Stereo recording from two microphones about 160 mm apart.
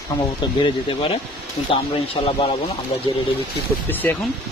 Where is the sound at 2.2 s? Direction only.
35° left (ahead or behind).